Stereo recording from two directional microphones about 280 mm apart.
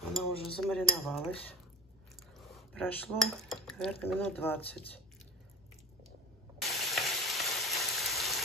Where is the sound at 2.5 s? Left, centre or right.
Centre.